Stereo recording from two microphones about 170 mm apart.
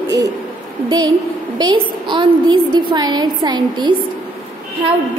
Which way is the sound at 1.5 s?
25° right (ahead or behind).